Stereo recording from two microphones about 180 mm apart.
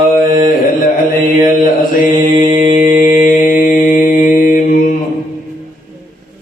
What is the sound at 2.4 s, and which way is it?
Mantra, 45° left (ahead or behind).